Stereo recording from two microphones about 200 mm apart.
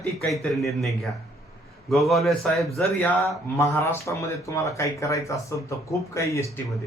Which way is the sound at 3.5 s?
15° left (ahead or behind).